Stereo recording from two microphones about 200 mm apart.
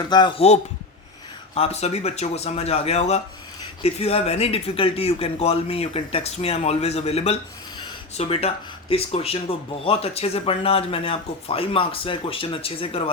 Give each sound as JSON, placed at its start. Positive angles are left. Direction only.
{"t": 0.0, "sound": "speech", "side_deg": 20}